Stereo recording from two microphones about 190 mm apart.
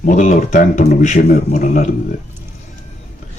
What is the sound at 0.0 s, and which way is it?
A man's voice, 45° left (ahead or behind).